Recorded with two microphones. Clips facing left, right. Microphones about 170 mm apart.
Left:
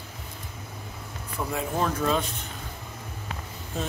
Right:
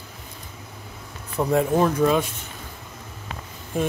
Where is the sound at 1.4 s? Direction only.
50° right (ahead or behind).